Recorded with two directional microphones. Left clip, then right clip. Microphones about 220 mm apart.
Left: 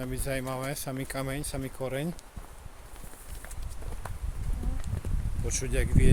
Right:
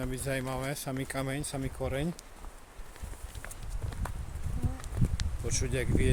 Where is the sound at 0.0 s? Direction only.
5° left (ahead or behind).